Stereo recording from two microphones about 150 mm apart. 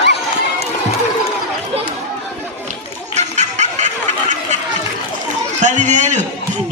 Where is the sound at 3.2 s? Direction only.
50° right (ahead or behind).